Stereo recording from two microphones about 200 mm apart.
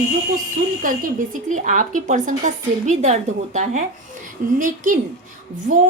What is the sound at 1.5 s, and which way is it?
Speech, 40° right (ahead or behind).